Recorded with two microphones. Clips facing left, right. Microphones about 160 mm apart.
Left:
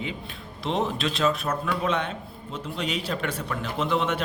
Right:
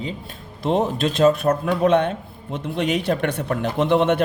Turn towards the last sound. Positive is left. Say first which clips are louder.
# right 8 dB
turn(degrees=-60)  # may be behind; listen again after turning